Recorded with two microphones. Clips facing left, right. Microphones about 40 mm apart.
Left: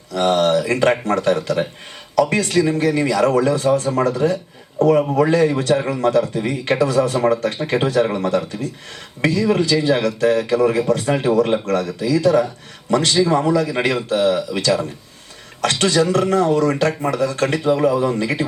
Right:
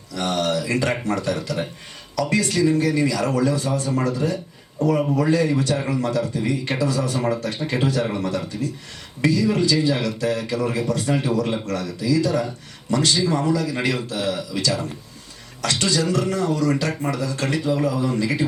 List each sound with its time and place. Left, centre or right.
0.1 s speech: left